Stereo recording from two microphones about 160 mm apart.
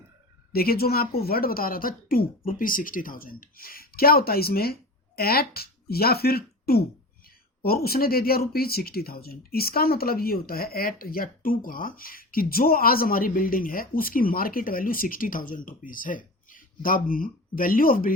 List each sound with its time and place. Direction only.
0.5 s speech: 70° left (ahead or behind)